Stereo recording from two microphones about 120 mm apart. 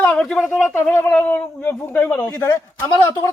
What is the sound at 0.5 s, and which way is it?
Speech, 15° left (ahead or behind).